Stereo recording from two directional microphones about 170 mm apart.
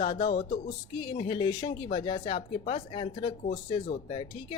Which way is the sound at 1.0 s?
30° left (ahead or behind).